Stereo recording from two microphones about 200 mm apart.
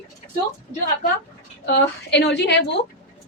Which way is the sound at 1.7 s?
60° left (ahead or behind).